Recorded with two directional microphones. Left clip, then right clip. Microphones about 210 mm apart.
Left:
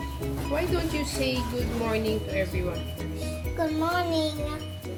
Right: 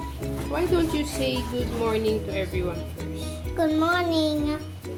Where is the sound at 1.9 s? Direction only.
30° right (ahead or behind).